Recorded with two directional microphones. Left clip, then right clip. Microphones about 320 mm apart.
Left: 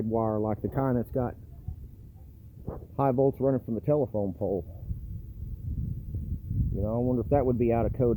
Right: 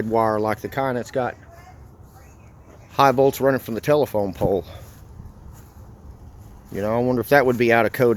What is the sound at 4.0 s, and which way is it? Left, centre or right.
Speech, right.